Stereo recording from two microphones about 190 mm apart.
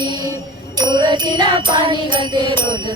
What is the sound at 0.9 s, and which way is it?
Music, 20° right (ahead or behind).